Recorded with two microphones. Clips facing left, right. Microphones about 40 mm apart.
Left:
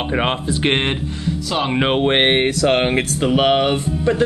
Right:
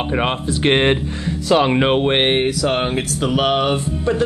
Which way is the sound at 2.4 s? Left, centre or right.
Left.